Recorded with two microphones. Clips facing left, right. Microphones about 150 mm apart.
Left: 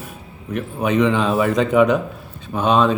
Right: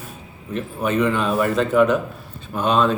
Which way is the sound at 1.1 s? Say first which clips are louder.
Left 2 dB; 20° left (ahead or behind).